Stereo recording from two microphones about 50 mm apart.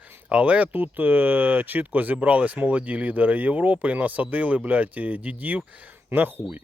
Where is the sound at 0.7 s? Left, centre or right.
Right.